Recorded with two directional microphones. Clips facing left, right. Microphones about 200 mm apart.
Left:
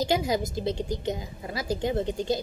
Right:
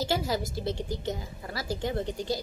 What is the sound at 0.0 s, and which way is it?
A woman's voice, 15° left (ahead or behind).